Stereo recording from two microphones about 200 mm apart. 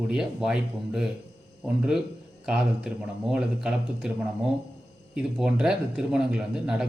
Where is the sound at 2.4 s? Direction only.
5° right (ahead or behind).